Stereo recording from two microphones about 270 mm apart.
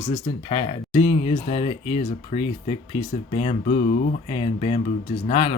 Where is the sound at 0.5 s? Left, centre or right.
Centre.